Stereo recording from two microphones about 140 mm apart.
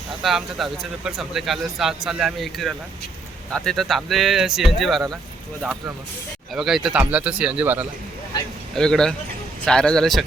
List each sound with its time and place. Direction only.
0.2 s speech: centre (ahead or behind)
6.5 s speech: centre (ahead or behind)
8.7 s speech: 5° left (ahead or behind)